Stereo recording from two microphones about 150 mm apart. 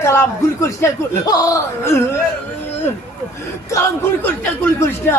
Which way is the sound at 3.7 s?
15° left (ahead or behind).